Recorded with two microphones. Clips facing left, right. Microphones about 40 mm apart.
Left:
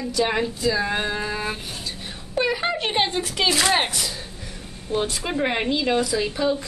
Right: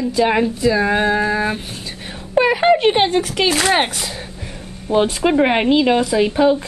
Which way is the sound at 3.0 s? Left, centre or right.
Right.